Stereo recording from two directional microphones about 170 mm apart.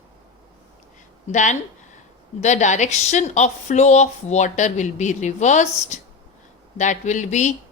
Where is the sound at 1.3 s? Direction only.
45° left (ahead or behind).